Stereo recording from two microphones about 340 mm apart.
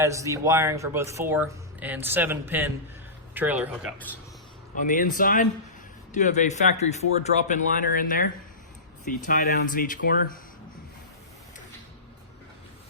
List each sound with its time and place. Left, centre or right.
0.0 s speech: centre
4.8 s speech: left